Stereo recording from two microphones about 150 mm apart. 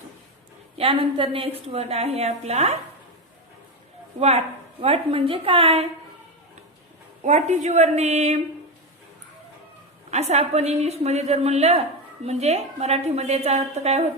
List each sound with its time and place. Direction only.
0.8 s a woman's voice: 35° right (ahead or behind)
4.2 s a woman's voice: 45° right (ahead or behind)
7.2 s a woman's voice: 50° right (ahead or behind)
10.1 s a woman's voice: 45° right (ahead or behind)